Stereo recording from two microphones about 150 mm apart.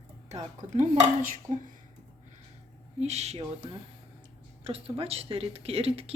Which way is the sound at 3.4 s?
35° right (ahead or behind).